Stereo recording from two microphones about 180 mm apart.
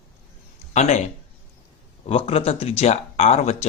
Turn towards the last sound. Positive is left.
turn(degrees=35)  # may be behind; listen again after turning